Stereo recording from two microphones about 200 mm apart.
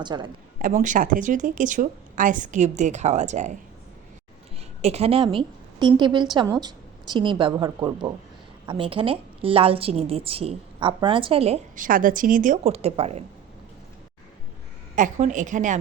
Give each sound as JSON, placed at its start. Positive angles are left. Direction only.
{"t": 0.0, "sound": "a woman's voice", "side_deg": -20}
{"t": 0.6, "sound": "speech", "side_deg": -40}
{"t": 4.8, "sound": "a woman's voice", "side_deg": -30}
{"t": 11.9, "sound": "speech", "side_deg": -45}
{"t": 14.9, "sound": "speech", "side_deg": -40}